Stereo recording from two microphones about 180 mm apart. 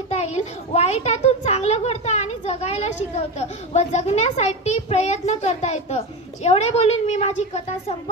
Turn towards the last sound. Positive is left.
turn(degrees=35)  # may be behind; listen again after turning